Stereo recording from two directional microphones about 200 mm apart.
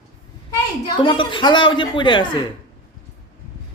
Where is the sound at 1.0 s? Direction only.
25° left (ahead or behind).